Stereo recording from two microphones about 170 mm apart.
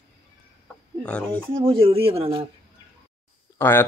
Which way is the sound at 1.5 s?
30° right (ahead or behind).